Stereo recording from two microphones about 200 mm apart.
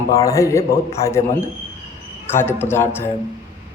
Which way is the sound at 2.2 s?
10° left (ahead or behind).